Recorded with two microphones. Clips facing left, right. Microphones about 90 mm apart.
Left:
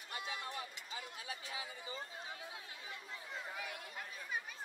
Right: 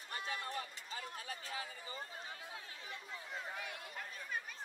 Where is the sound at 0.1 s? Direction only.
40° right (ahead or behind).